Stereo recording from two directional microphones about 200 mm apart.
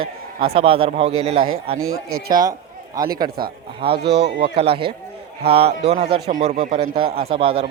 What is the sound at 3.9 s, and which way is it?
Speech, 55° right (ahead or behind).